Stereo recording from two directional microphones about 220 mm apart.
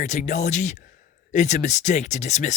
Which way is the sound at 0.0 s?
35° left (ahead or behind).